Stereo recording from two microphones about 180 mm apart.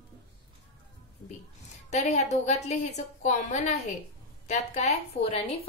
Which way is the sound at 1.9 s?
40° left (ahead or behind).